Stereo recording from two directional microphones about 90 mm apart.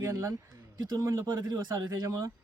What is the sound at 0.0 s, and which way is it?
Speech, 35° right (ahead or behind).